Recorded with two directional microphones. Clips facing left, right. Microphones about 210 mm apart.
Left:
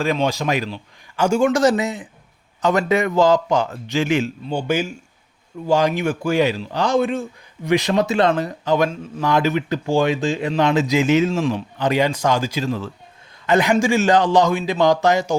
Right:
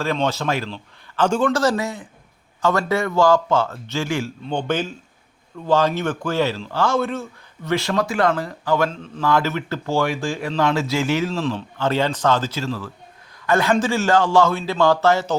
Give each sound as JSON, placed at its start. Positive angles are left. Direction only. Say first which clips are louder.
{"t": 0.0, "sound": "speech", "louder": "left 2 dB", "side_deg": 15}
{"t": 4.4, "sound": "speech", "louder": "left 2 dB", "side_deg": 10}
{"t": 8.9, "sound": "speech", "louder": "even", "side_deg": 10}